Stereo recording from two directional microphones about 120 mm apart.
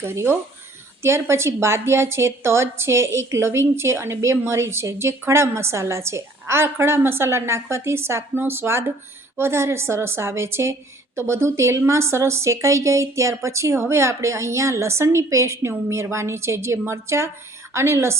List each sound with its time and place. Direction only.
0.0 s a woman's voice: 20° right (ahead or behind)